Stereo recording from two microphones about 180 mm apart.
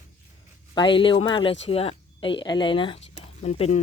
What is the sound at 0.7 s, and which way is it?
Speech, 25° left (ahead or behind).